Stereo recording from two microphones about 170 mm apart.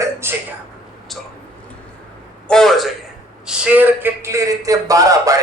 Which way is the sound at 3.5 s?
10° right (ahead or behind).